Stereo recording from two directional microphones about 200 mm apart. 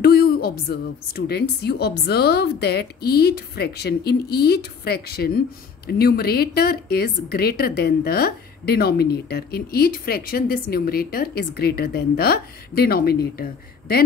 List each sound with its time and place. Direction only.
0.0 s a woman's voice: 50° left (ahead or behind)